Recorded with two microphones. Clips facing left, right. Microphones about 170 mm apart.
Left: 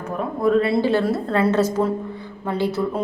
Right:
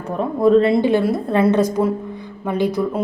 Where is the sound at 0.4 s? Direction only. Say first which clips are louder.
Right 4 dB; 25° right (ahead or behind).